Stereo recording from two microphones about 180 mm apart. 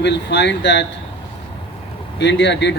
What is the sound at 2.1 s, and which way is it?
Speech, 75° left (ahead or behind).